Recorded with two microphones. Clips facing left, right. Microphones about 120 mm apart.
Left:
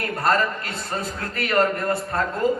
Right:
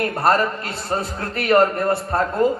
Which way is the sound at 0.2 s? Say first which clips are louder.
Right 2 dB; 30° right (ahead or behind).